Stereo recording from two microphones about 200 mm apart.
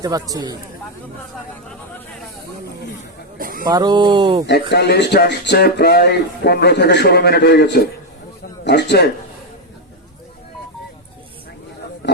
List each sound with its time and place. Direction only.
0.0 s speech: 20° right (ahead or behind)
3.3 s a sound: 45° right (ahead or behind)
3.7 s speech: 20° right (ahead or behind)
4.4 s a man's voice: 55° left (ahead or behind)